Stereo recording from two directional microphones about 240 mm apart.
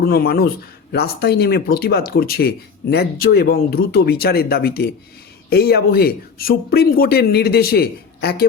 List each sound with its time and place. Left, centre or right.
0.0 s speech: left